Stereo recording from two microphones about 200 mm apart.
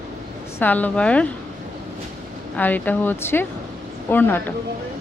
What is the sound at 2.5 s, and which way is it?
Speech, 10° left (ahead or behind).